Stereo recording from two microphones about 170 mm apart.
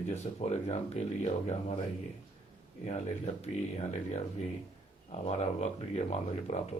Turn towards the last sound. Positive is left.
turn(degrees=40)  # may be behind; listen again after turning